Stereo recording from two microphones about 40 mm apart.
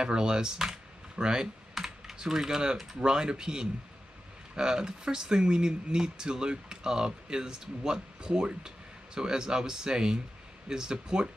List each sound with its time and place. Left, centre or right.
0.0 s speech: centre